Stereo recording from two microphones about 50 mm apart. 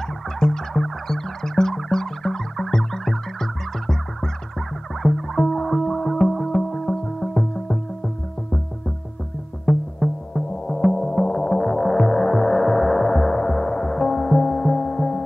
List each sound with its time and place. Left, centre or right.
0.4 s music: centre
9.7 s music: centre